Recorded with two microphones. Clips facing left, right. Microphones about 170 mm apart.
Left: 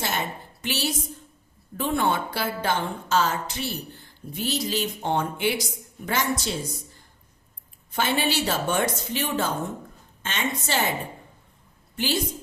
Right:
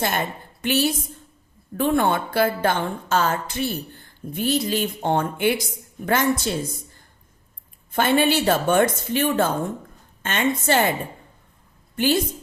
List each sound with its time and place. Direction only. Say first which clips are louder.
0.0 s a woman's voice: right 4 dB; 55° right (ahead or behind)
7.9 s a woman's voice: right 6 dB; 55° right (ahead or behind)
11.9 s a woman's voice: right 6 dB; 55° right (ahead or behind)